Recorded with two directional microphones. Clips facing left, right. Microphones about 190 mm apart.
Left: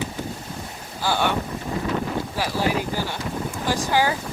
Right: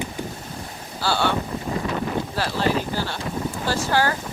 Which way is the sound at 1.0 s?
15° left (ahead or behind).